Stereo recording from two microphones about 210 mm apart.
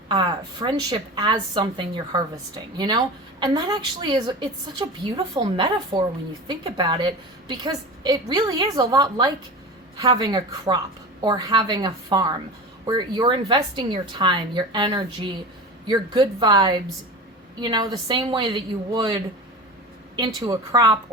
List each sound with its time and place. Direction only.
0.1 s a woman's voice: 20° right (ahead or behind)